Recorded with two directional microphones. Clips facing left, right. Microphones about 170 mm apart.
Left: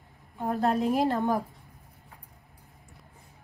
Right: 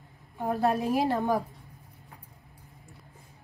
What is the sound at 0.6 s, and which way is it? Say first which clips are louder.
Speech: left 1 dB; 15° right (ahead or behind).